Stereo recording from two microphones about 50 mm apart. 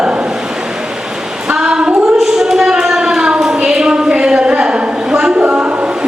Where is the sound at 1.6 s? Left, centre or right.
Centre.